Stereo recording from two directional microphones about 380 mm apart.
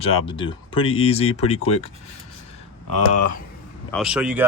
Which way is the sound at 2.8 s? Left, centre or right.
Left.